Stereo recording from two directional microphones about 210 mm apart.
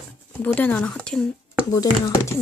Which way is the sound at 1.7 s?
15° left (ahead or behind).